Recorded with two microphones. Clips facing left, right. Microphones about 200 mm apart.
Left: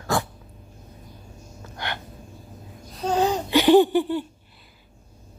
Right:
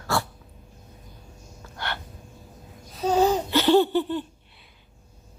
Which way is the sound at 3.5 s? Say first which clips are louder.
Left 3 dB; 15° left (ahead or behind).